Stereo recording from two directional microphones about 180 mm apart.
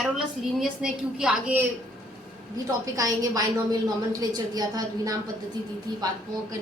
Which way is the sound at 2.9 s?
20° right (ahead or behind).